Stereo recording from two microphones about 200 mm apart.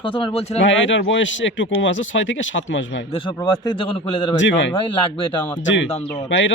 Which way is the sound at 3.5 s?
25° left (ahead or behind).